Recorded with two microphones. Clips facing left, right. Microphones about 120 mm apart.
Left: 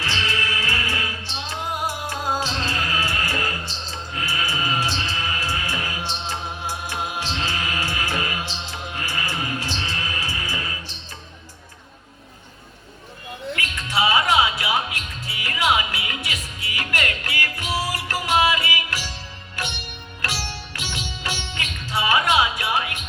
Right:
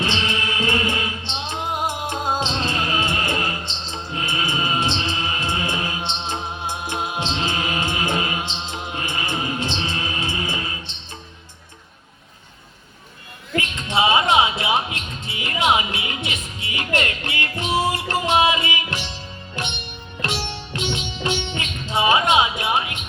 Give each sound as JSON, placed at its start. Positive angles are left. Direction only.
{"t": 0.0, "sound": "music", "side_deg": -20}
{"t": 13.6, "sound": "music", "side_deg": -25}